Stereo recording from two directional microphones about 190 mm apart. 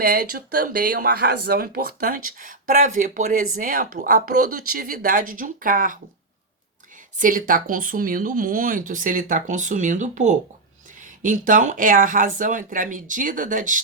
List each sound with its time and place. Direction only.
0.0 s speech: 55° right (ahead or behind)
7.2 s speech: 45° right (ahead or behind)